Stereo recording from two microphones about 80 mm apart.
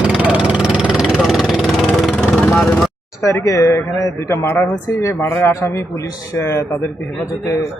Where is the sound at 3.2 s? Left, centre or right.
Left.